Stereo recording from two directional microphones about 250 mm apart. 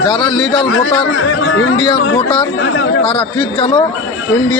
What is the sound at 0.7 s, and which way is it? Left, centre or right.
Speech, left.